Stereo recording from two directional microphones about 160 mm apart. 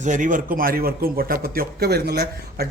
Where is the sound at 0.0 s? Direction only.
50° right (ahead or behind).